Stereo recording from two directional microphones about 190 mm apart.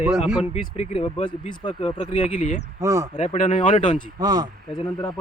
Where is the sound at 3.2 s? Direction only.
35° left (ahead or behind).